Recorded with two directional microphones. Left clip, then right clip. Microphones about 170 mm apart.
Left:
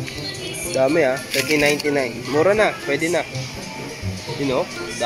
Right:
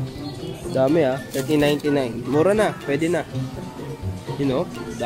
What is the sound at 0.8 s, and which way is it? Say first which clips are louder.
Speech: left 1 dB; 15° right (ahead or behind).